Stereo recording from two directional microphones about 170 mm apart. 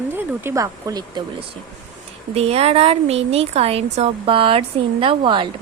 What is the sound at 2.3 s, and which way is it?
Speech, 35° right (ahead or behind).